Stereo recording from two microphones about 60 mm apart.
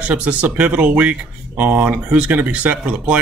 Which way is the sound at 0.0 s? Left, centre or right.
Right.